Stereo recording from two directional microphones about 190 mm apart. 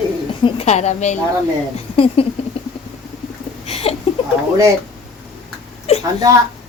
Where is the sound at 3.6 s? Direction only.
35° left (ahead or behind).